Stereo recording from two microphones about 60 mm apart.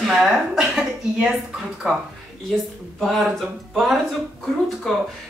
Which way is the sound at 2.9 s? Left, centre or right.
Centre.